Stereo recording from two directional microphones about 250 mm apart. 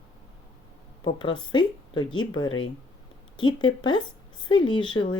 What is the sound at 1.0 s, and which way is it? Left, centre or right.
Speech, centre.